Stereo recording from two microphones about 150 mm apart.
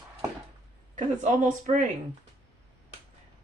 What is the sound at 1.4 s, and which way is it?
Speech, 60° right (ahead or behind).